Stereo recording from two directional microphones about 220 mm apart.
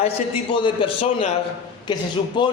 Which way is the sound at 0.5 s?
25° left (ahead or behind).